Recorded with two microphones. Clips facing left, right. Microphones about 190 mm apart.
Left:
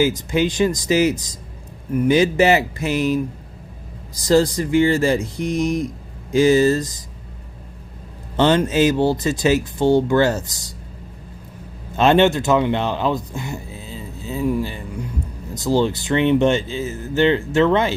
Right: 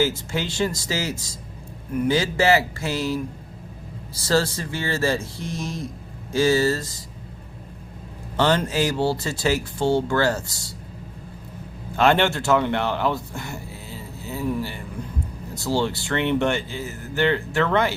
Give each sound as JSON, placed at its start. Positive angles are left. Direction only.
{"t": 0.0, "sound": "speech", "side_deg": 15}
{"t": 8.4, "sound": "speech", "side_deg": 20}
{"t": 11.9, "sound": "speech", "side_deg": 20}